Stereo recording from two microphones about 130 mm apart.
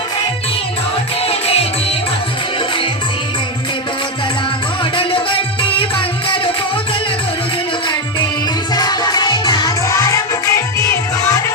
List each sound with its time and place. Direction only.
1.2 s music: 50° left (ahead or behind)
4.9 s music: 40° left (ahead or behind)
8.7 s music: 30° left (ahead or behind)